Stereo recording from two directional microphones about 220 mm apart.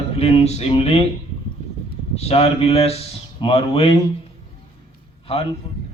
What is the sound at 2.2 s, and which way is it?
A man's voice, 30° left (ahead or behind).